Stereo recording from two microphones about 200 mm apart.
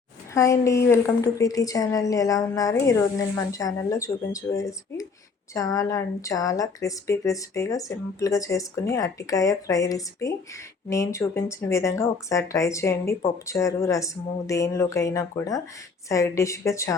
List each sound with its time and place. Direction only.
0.3 s speech: 15° left (ahead or behind)